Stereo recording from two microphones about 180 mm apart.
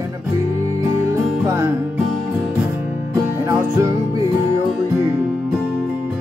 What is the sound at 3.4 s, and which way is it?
Music, 15° right (ahead or behind).